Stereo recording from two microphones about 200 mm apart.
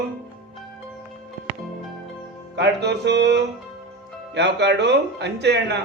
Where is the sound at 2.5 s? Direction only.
60° right (ahead or behind).